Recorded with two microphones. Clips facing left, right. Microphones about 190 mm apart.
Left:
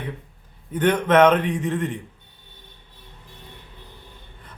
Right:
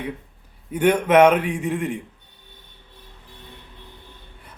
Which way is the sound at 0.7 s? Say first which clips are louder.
Right 2 dB; 10° right (ahead or behind).